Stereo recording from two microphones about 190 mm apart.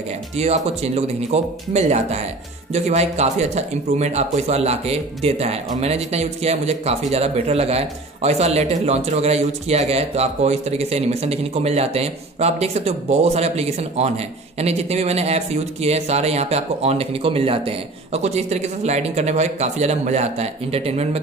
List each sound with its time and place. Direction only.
0.4 s speech: 35° right (ahead or behind)